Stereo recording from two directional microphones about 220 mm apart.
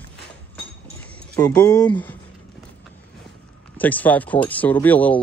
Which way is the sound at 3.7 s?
5° left (ahead or behind).